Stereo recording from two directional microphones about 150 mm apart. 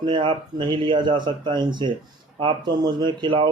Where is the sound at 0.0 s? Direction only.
30° right (ahead or behind).